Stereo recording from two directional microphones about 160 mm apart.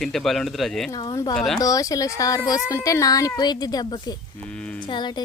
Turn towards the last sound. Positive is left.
turn(degrees=30)  # may be behind; listen again after turning